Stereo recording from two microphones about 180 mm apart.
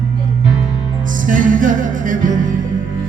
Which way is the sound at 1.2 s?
45° right (ahead or behind).